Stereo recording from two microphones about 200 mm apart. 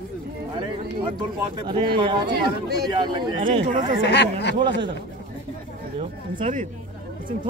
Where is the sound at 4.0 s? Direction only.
60° left (ahead or behind).